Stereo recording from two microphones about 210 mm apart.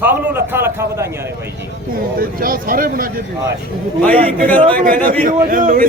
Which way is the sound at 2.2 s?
45° right (ahead or behind).